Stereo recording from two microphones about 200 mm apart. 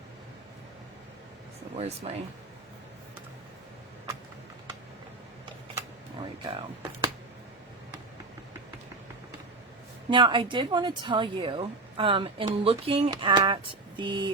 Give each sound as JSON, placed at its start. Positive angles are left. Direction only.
{"t": 1.7, "sound": "speech", "side_deg": -35}
{"t": 6.4, "sound": "a woman's voice", "side_deg": -25}
{"t": 10.1, "sound": "a woman's voice", "side_deg": -25}